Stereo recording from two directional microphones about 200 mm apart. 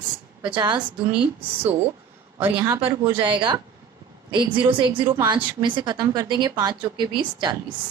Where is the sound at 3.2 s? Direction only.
25° right (ahead or behind).